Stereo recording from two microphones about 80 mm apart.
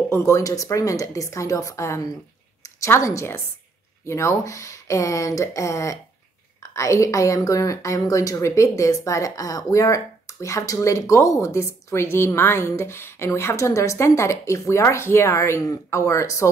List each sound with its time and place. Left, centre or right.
0.1 s a woman's voice: left